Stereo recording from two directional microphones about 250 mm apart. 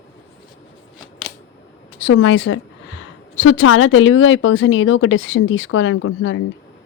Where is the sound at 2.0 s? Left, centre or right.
Left.